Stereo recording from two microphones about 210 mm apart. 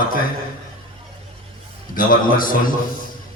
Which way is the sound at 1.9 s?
40° left (ahead or behind).